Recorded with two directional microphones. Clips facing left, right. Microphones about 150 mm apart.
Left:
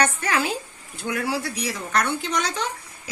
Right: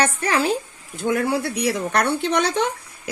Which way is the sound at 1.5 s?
60° right (ahead or behind).